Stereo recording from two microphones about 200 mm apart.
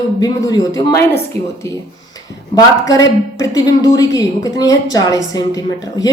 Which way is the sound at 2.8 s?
15° left (ahead or behind).